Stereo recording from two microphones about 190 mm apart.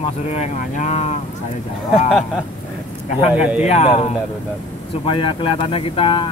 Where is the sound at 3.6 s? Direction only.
35° left (ahead or behind).